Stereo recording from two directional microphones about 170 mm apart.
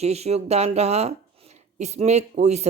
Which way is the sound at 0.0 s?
40° right (ahead or behind).